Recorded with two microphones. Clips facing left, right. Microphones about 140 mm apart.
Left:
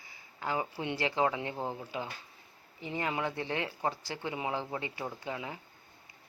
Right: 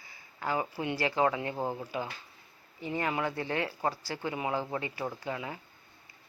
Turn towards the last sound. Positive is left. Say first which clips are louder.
# right 2 dB
turn(degrees=25)  # may be behind; listen again after turning